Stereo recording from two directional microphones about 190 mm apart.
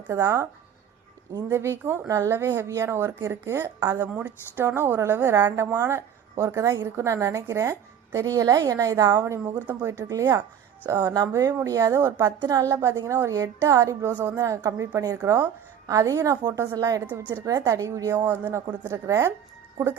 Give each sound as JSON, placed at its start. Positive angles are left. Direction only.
{"t": 0.1, "sound": "speech", "side_deg": -15}